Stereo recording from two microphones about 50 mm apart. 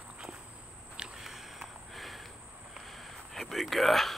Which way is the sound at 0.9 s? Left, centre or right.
Centre.